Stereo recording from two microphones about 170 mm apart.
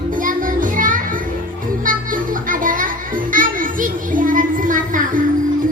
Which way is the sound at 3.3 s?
55° right (ahead or behind).